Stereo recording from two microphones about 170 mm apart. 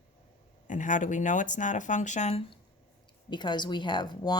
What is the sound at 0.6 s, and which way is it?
Speech, 50° left (ahead or behind).